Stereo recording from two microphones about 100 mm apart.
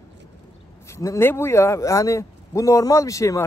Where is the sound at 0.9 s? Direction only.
30° left (ahead or behind).